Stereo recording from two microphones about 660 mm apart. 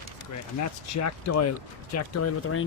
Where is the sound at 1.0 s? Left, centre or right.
Left.